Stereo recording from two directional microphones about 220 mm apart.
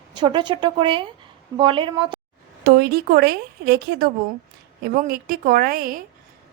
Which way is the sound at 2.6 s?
45° right (ahead or behind).